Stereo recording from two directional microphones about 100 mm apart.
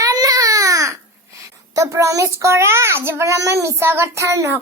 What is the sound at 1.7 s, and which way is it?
A child's voice, 30° right (ahead or behind).